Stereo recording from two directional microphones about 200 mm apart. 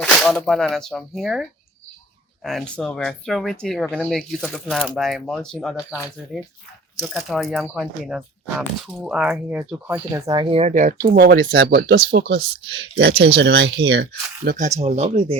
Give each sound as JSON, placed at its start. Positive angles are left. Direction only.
{"t": 0.0, "sound": "speech", "side_deg": 0}
{"t": 7.0, "sound": "speech", "side_deg": 0}
{"t": 10.4, "sound": "speech", "side_deg": -30}
{"t": 14.5, "sound": "speech", "side_deg": -35}